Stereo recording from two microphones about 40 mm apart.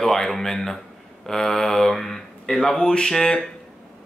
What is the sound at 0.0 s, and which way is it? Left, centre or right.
Speech, centre.